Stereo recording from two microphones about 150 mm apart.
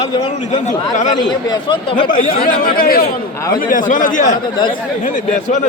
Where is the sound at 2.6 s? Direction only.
75° left (ahead or behind).